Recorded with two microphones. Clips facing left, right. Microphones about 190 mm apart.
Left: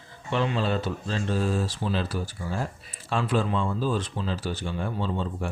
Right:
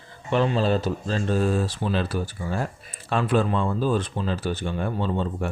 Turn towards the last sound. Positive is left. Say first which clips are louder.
# right 3 dB
turn(degrees=-55)  # may be behind; listen again after turning